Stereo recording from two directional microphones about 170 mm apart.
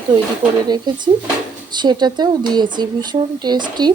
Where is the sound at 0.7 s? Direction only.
25° right (ahead or behind).